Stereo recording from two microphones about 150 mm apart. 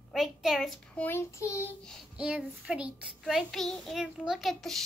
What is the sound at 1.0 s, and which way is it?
Child singing, 15° left (ahead or behind).